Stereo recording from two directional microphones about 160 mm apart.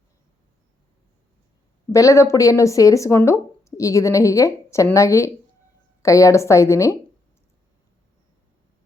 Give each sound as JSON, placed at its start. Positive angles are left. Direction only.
{"t": 1.9, "sound": "speech", "side_deg": 20}